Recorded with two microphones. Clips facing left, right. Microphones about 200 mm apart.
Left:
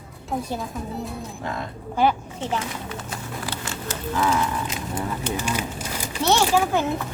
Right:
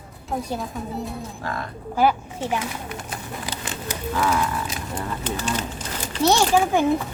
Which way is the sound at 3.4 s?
15° right (ahead or behind).